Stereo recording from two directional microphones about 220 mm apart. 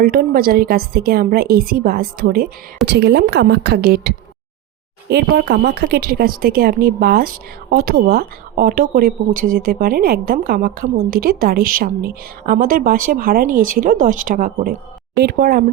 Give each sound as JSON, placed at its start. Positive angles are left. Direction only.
{"t": 0.0, "sound": "a woman's voice", "side_deg": -40}